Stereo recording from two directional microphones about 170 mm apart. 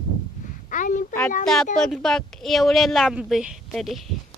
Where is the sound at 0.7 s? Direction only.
50° left (ahead or behind).